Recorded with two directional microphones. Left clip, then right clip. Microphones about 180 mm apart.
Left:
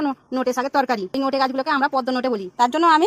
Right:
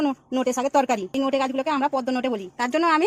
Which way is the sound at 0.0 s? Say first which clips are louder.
Left 1 dB; 5° right (ahead or behind).